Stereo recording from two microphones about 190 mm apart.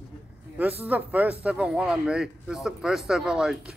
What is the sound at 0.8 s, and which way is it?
Speech, 10° right (ahead or behind).